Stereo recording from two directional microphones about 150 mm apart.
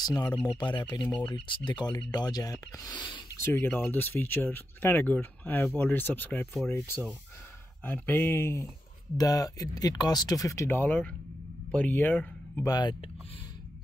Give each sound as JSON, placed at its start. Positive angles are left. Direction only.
{"t": 0.0, "sound": "speech", "side_deg": 25}
{"t": 3.4, "sound": "speech", "side_deg": 15}
{"t": 12.6, "sound": "speech", "side_deg": 30}